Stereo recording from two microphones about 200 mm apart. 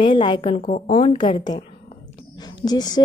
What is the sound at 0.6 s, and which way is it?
Speech, 45° left (ahead or behind).